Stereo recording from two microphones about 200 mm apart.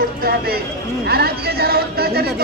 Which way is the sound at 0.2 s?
50° right (ahead or behind).